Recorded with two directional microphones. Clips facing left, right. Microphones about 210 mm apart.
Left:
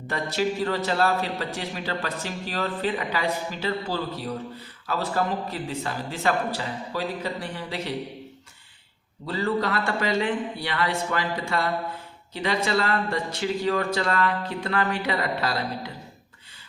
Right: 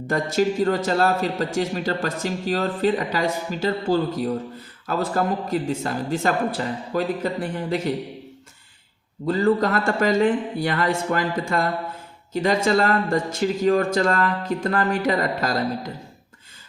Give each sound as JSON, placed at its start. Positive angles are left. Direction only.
{"t": 0.1, "sound": "speech", "side_deg": -45}
{"t": 9.2, "sound": "speech", "side_deg": -45}